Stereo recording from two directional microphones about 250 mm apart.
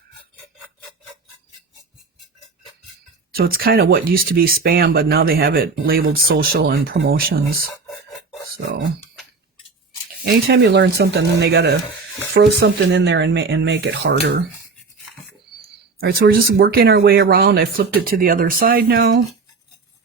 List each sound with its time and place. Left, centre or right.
0.3 s a sound: centre
3.3 s speech: right
10.2 s speech: right
16.0 s speech: right